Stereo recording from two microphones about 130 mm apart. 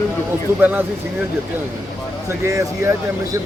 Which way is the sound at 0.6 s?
15° right (ahead or behind).